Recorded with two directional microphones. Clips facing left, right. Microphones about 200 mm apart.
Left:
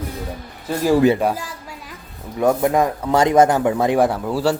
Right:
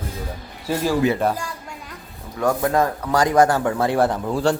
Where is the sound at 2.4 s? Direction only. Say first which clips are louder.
Left 3 dB; 20° left (ahead or behind).